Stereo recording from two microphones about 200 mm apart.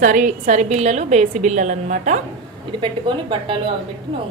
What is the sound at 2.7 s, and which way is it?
A woman's voice, 25° right (ahead or behind).